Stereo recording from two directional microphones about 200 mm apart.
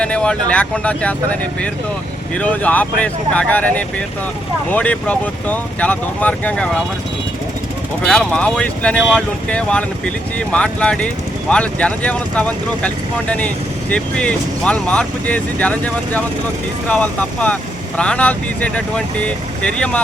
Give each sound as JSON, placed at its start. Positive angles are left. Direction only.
{"t": 0.0, "sound": "speech", "side_deg": 5}
{"t": 8.0, "sound": "speech", "side_deg": 5}